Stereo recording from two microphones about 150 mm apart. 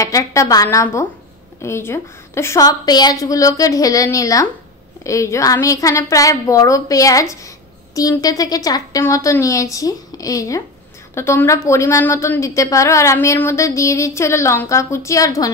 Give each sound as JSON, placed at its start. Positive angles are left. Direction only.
{"t": 0.0, "sound": "a woman's voice", "side_deg": 20}